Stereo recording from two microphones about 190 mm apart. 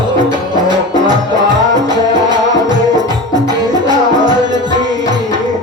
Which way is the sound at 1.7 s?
20° right (ahead or behind).